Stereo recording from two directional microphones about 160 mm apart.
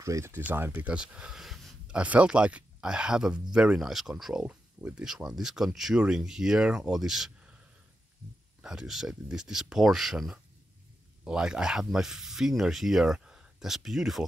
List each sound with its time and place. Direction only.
0.0 s speech: 20° right (ahead or behind)
8.6 s speech: 5° right (ahead or behind)